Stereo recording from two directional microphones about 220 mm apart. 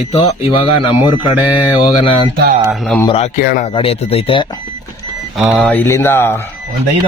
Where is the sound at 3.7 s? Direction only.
25° left (ahead or behind).